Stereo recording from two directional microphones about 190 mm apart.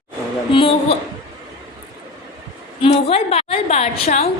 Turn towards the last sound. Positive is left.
turn(degrees=30)  # may be behind; listen again after turning